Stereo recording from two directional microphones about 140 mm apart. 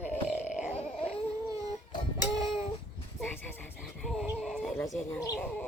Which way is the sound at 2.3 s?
25° right (ahead or behind).